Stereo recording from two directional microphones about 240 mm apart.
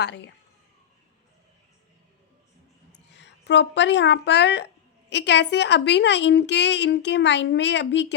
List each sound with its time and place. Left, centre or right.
3.1 s a woman's voice: left